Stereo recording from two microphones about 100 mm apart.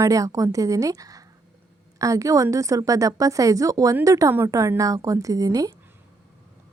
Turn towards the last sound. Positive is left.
turn(degrees=-35)  # may be behind; listen again after turning